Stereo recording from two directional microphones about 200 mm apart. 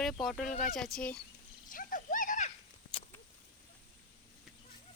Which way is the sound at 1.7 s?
40° left (ahead or behind).